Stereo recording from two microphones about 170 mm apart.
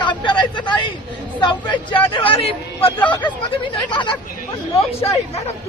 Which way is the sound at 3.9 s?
30° left (ahead or behind).